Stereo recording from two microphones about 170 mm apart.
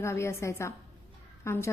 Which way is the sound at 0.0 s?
15° left (ahead or behind).